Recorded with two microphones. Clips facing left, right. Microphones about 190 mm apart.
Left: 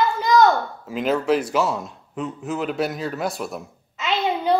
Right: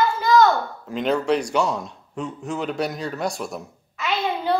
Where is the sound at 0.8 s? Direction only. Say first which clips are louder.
Left 1 dB; 5° left (ahead or behind).